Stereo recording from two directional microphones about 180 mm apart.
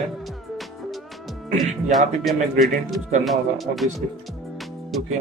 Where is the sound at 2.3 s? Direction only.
Centre (ahead or behind).